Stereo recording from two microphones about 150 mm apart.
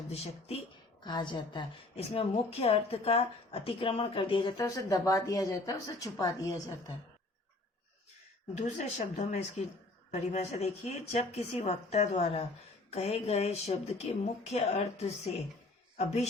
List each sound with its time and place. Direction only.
1.0 s a woman's voice: 30° left (ahead or behind)
8.5 s a woman's voice: 50° left (ahead or behind)